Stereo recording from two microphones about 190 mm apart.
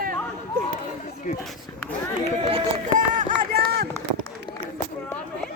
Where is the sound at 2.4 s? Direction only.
30° right (ahead or behind).